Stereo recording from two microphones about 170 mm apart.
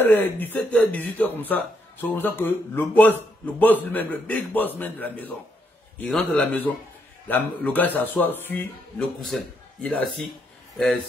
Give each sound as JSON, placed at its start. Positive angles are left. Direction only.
{"t": 0.0, "sound": "speech", "side_deg": 10}